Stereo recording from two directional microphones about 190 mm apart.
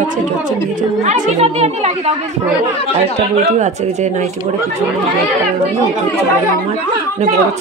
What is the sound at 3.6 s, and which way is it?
Speech, 35° right (ahead or behind).